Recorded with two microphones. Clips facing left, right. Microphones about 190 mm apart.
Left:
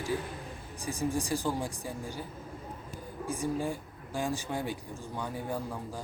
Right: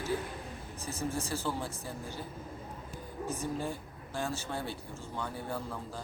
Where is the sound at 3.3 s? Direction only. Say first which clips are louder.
Left 4 dB; 10° left (ahead or behind).